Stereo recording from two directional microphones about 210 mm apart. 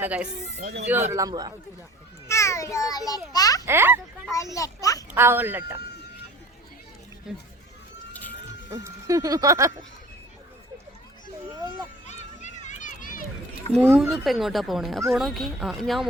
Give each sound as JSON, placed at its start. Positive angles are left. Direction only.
{"t": 0.0, "sound": "speech", "side_deg": -5}
{"t": 1.1, "sound": "a man's voice", "side_deg": -15}
{"t": 2.2, "sound": "a child's voice", "side_deg": 15}
{"t": 3.7, "sound": "speech", "side_deg": -10}
{"t": 4.3, "sound": "a child's voice", "side_deg": 15}
{"t": 5.1, "sound": "speech", "side_deg": -10}
{"t": 8.7, "sound": "speech", "side_deg": -15}
{"t": 12.0, "sound": "children playing", "side_deg": 35}
{"t": 13.7, "sound": "speech", "side_deg": 0}